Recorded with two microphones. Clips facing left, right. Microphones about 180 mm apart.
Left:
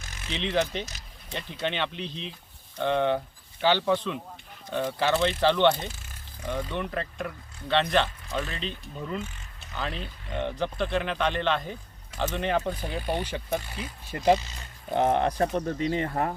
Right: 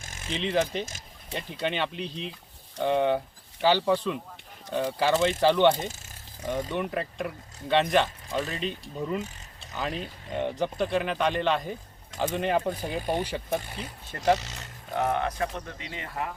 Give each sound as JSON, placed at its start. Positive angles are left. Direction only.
{"t": 0.0, "sound": "a sound", "side_deg": -45}
{"t": 0.3, "sound": "speech", "side_deg": -5}
{"t": 5.7, "sound": "speech", "side_deg": -45}
{"t": 6.4, "sound": "speech", "side_deg": -20}
{"t": 6.8, "sound": "speech", "side_deg": -5}
{"t": 9.9, "sound": "speech", "side_deg": -45}
{"t": 10.3, "sound": "speech", "side_deg": -15}
{"t": 13.0, "sound": "speech", "side_deg": -45}
{"t": 14.3, "sound": "wild animals", "side_deg": -80}
{"t": 14.9, "sound": "speech", "side_deg": 35}